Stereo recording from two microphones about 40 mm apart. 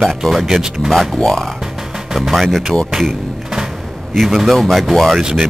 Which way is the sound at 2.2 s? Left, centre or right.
Centre.